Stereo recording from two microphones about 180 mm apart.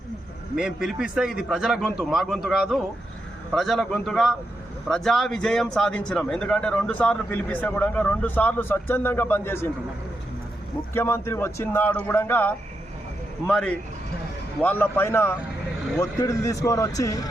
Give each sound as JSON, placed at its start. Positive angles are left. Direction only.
{"t": 0.5, "sound": "a man's voice", "side_deg": -5}
{"t": 10.9, "sound": "a man's voice", "side_deg": 15}